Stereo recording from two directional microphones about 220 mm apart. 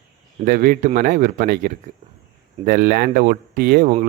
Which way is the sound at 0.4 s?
40° right (ahead or behind).